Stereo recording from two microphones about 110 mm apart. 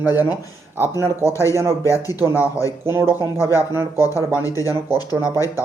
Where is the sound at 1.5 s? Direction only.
25° right (ahead or behind).